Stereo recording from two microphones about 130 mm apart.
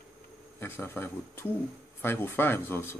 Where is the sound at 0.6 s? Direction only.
15° left (ahead or behind).